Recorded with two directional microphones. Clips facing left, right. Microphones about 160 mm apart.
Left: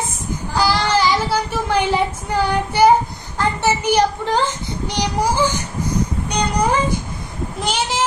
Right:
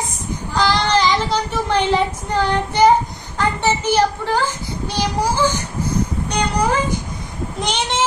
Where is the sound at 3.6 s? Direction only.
15° left (ahead or behind).